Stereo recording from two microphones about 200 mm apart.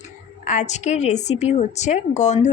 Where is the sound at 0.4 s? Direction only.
35° left (ahead or behind).